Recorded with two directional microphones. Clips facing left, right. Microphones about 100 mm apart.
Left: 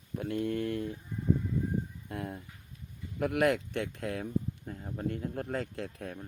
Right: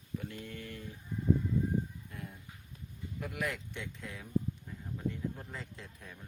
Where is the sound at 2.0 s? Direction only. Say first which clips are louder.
Left 9 dB; 65° left (ahead or behind).